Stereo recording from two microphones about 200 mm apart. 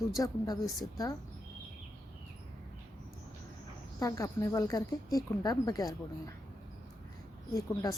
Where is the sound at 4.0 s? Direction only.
15° left (ahead or behind).